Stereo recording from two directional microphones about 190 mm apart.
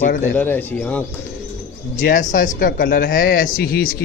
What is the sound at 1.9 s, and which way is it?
Speech, 45° left (ahead or behind).